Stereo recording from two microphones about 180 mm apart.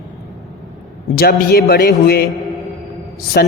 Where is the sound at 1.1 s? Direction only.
60° left (ahead or behind).